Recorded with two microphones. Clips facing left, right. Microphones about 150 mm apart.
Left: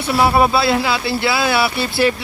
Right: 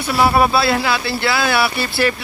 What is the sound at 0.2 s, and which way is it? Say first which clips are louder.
A man's voice: even; 20° left (ahead or behind).